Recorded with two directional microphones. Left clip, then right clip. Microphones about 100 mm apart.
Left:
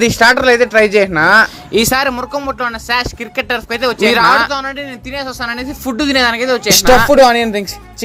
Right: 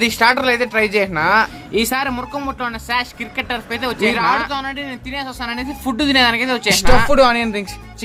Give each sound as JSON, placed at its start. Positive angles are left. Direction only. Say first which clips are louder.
{"t": 0.0, "sound": "a woman's voice", "louder": "left 5 dB", "side_deg": 30}
{"t": 2.5, "sound": "speech", "louder": "left 5 dB", "side_deg": 25}
{"t": 4.1, "sound": "a woman's voice", "louder": "left 8 dB", "side_deg": 45}
{"t": 4.4, "sound": "speech", "louder": "left 4 dB", "side_deg": 25}
{"t": 6.1, "sound": "speech", "louder": "left 2 dB", "side_deg": 25}
{"t": 6.7, "sound": "a woman's voice", "louder": "left 7 dB", "side_deg": 40}